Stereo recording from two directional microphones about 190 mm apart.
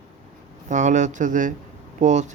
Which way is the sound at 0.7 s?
40° right (ahead or behind).